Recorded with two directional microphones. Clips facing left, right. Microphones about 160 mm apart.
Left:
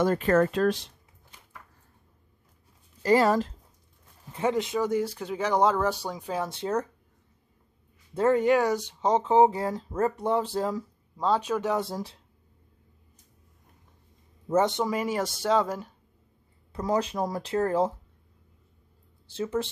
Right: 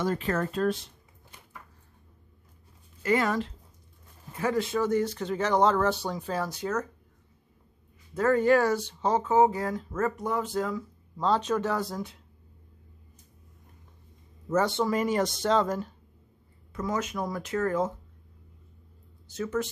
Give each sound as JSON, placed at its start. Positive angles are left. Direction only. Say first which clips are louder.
{"t": 0.0, "sound": "speech", "louder": "left 6 dB", "side_deg": 55}
{"t": 3.0, "sound": "speech", "louder": "left 4 dB", "side_deg": 35}
{"t": 4.3, "sound": "speech", "louder": "left 1 dB", "side_deg": 25}
{"t": 8.1, "sound": "speech", "louder": "even", "side_deg": 25}
{"t": 11.1, "sound": "speech", "louder": "even", "side_deg": 10}
{"t": 11.7, "sound": "speech", "louder": "left 2 dB", "side_deg": 30}
{"t": 14.5, "sound": "speech", "louder": "left 1 dB", "side_deg": 20}
{"t": 16.7, "sound": "speech", "louder": "left 4 dB", "side_deg": 35}
{"t": 19.2, "sound": "speech", "louder": "left 1 dB", "side_deg": 30}